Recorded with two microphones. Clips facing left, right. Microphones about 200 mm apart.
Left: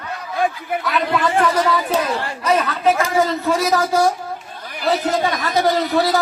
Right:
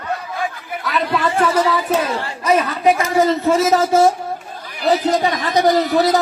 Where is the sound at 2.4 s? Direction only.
10° right (ahead or behind).